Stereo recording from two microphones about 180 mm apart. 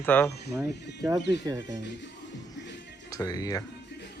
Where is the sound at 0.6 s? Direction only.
15° right (ahead or behind).